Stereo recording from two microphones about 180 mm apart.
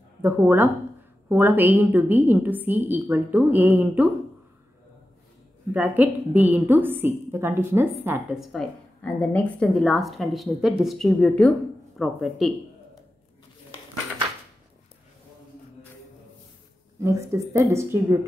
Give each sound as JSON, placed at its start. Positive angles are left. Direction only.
{"t": 0.2, "sound": "a woman's voice", "side_deg": -10}
{"t": 5.7, "sound": "a woman's voice", "side_deg": -10}
{"t": 8.4, "sound": "a woman's voice", "side_deg": 0}
{"t": 17.0, "sound": "a woman's voice", "side_deg": -15}